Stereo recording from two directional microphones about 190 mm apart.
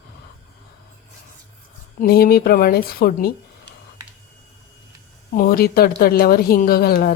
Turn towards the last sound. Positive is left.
turn(degrees=55)  # may be behind; listen again after turning